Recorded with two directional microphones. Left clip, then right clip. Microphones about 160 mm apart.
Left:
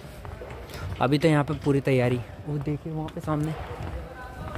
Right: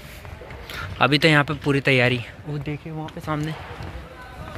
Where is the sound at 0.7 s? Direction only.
5° left (ahead or behind).